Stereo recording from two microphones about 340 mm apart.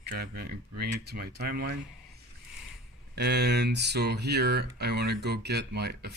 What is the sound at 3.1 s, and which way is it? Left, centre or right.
Speech, right.